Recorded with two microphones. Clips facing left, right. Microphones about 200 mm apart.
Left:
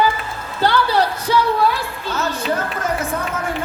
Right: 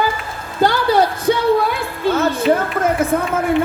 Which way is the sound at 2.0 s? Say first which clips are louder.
Right 10 dB; 55° right (ahead or behind).